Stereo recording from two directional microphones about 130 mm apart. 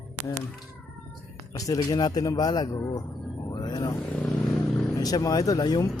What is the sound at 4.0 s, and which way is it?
Vehicle, 5° left (ahead or behind).